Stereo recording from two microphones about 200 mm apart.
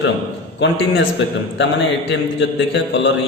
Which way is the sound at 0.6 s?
65° left (ahead or behind).